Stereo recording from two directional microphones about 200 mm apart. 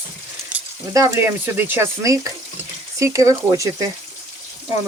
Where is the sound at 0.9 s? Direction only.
15° right (ahead or behind).